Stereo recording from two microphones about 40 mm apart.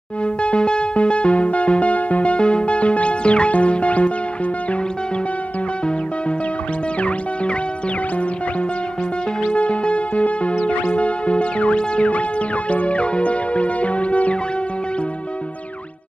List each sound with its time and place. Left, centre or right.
0.2 s music: left
7.0 s music: left
9.5 s music: left